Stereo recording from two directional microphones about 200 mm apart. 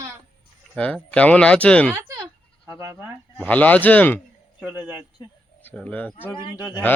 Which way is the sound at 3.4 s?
10° left (ahead or behind).